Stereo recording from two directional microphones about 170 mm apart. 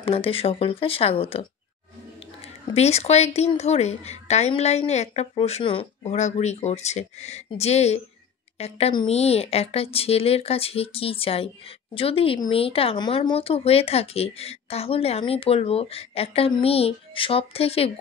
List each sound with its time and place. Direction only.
0.0 s speech: 35° left (ahead or behind)
2.4 s speech: 40° left (ahead or behind)